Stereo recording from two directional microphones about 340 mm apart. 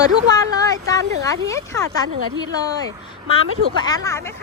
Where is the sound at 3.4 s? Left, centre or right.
Centre.